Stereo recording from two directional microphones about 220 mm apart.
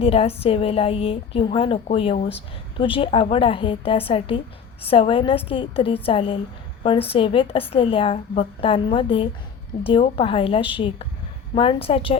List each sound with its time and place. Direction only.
0.0 s a woman's voice: 25° left (ahead or behind)